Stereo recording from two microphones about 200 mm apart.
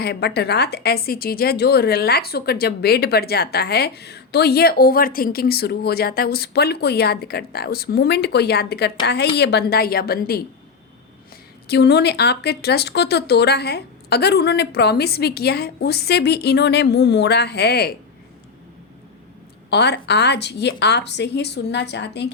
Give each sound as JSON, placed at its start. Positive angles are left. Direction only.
{"t": 0.0, "sound": "a woman's voice", "side_deg": 55}
{"t": 11.7, "sound": "speech", "side_deg": 55}
{"t": 19.7, "sound": "speech", "side_deg": 55}